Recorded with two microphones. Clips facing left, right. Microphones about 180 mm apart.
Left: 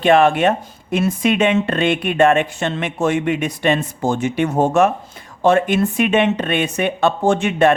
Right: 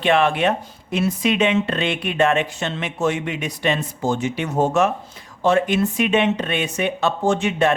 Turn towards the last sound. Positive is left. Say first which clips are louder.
# left 4 dB
turn(degrees=55)  # may be behind; listen again after turning